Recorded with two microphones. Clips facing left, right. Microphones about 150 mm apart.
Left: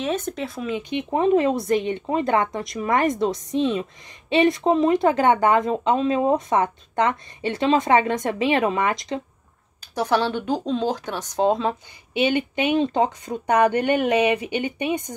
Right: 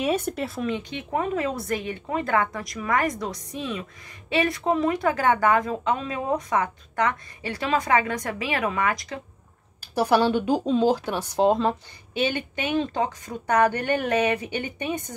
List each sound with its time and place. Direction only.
0.0 s speech: 10° right (ahead or behind); by 1.0 s 10° left (ahead or behind)
1.1 s speech: 25° left (ahead or behind)
9.8 s speech: 10° right (ahead or behind)
12.1 s speech: 15° left (ahead or behind)